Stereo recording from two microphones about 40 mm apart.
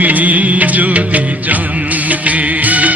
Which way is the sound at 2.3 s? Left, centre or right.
Right.